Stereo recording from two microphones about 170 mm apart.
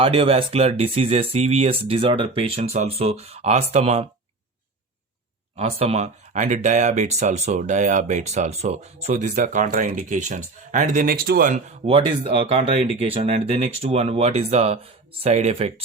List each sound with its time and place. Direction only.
0.0 s speech: 35° right (ahead or behind)
5.5 s speech: 35° right (ahead or behind); by 11.6 s 55° right (ahead or behind)
11.9 s speech: 30° right (ahead or behind)